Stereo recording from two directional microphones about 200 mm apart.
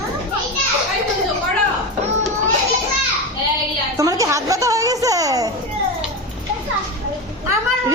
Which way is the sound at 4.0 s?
15° right (ahead or behind).